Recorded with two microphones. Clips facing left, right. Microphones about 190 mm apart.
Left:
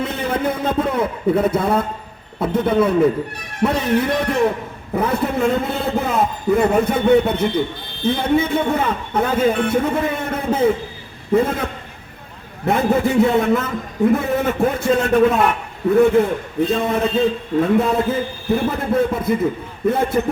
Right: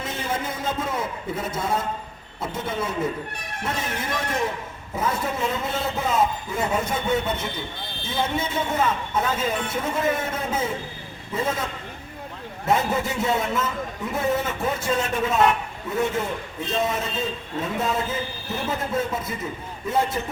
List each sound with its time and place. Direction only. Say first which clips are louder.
0.0 s a man's voice: left 8 dB; 60° left (ahead or behind)
16.6 s a man's voice: left 6 dB; 60° left (ahead or behind)